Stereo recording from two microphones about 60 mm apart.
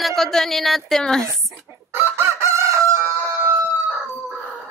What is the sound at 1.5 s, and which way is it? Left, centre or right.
Chicken, right.